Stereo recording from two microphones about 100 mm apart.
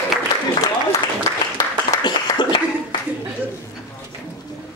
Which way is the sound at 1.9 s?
45° left (ahead or behind).